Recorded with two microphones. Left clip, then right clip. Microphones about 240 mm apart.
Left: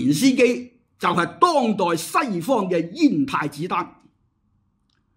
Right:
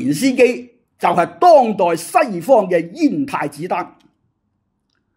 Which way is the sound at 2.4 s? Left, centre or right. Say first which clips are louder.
Right 8 dB; centre.